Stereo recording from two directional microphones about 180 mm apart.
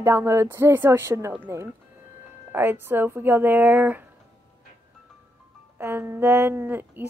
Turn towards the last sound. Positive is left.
turn(degrees=-10)  # may be behind; listen again after turning